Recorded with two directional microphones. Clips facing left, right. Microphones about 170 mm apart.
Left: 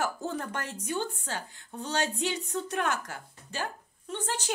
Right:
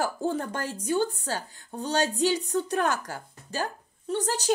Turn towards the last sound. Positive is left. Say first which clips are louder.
# right 7 dB
turn(degrees=-40)  # may be behind; listen again after turning